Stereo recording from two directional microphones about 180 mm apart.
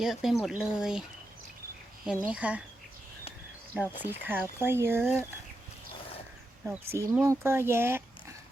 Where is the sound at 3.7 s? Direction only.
5° right (ahead or behind).